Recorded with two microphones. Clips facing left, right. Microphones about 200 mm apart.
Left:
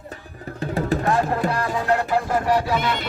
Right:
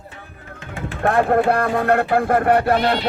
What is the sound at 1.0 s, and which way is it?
Music, 60° right (ahead or behind).